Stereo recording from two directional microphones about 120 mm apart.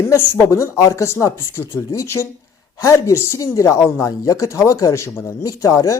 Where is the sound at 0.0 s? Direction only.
20° left (ahead or behind).